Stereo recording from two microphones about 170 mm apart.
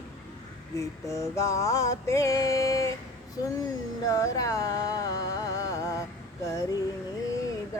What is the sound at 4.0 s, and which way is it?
Music, 20° left (ahead or behind).